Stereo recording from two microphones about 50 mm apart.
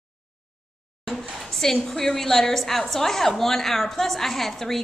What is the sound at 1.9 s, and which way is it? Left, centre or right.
A woman's voice, centre.